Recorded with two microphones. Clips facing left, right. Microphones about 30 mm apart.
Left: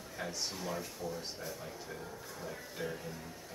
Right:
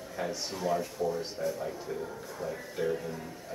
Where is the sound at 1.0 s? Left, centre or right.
Centre.